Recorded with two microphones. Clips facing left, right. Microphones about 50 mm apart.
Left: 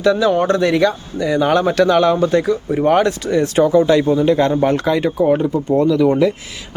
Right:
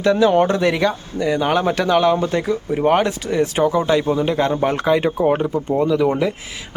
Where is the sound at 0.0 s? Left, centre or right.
Centre.